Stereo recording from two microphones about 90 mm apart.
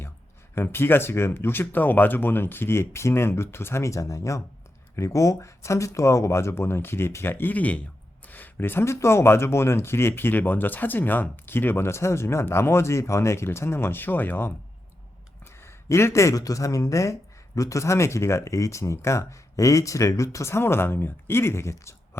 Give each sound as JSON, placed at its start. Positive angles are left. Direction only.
{"t": 0.5, "sound": "speech", "side_deg": 25}